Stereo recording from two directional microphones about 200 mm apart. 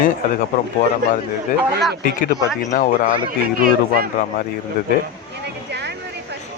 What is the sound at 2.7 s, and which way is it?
Speech, 40° left (ahead or behind).